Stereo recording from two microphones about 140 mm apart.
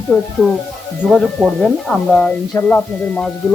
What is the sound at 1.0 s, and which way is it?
Speech, 5° left (ahead or behind).